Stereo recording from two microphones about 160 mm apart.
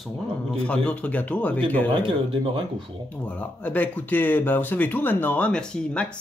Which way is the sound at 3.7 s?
10° left (ahead or behind).